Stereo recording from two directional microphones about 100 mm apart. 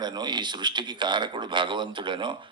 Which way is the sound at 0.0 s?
45° right (ahead or behind).